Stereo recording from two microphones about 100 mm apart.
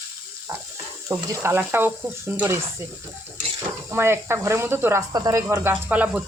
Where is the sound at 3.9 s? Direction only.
25° right (ahead or behind).